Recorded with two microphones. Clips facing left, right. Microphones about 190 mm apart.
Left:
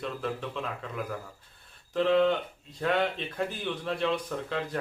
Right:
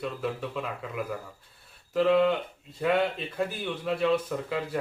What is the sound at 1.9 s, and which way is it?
Speech, 5° right (ahead or behind).